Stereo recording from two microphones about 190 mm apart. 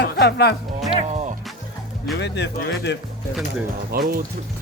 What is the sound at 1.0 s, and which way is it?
Music, 35° right (ahead or behind).